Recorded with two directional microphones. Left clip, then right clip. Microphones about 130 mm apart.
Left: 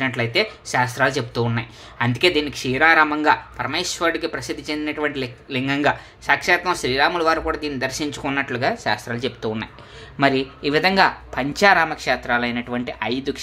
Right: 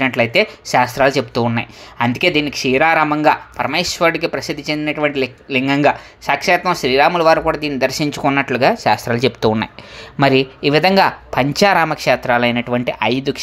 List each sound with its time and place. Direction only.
0.0 s speech: 45° right (ahead or behind); by 9.7 s 65° right (ahead or behind)
10.2 s speech: 50° right (ahead or behind)